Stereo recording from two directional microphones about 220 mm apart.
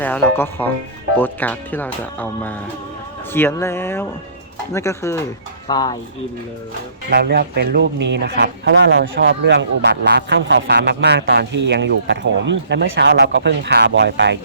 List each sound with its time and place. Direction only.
0.0 s speech: 10° left (ahead or behind)
7.1 s speech: 45° right (ahead or behind)